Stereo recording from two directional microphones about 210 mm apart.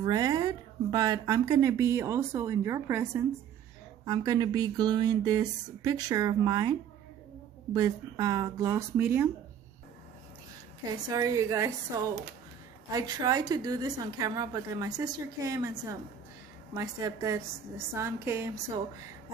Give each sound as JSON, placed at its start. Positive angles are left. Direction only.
{"t": 0.0, "sound": "speech", "side_deg": -20}
{"t": 7.7, "sound": "speech", "side_deg": -15}
{"t": 10.9, "sound": "speech", "side_deg": -15}